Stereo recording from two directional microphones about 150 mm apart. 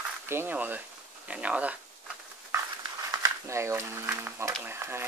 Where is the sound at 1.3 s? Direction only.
10° right (ahead or behind).